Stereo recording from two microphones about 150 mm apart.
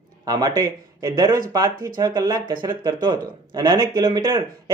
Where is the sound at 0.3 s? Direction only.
25° right (ahead or behind).